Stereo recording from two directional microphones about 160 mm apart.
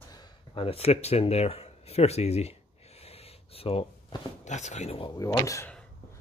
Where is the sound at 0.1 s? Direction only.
25° left (ahead or behind).